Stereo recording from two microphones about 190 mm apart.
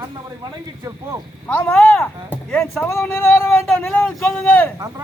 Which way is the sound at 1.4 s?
10° left (ahead or behind).